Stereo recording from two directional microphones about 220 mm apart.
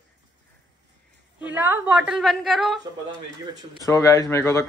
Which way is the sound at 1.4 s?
10° right (ahead or behind).